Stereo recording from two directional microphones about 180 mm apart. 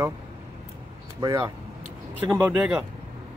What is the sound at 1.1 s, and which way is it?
Speech, 20° right (ahead or behind).